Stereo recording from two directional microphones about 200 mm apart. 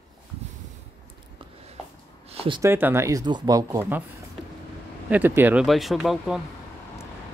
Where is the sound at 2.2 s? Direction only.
25° right (ahead or behind).